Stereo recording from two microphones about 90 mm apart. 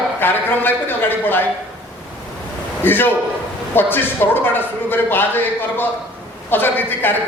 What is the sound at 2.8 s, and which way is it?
A man's voice, 25° left (ahead or behind).